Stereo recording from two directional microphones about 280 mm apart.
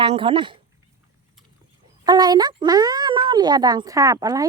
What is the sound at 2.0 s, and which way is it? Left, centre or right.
Speech, centre.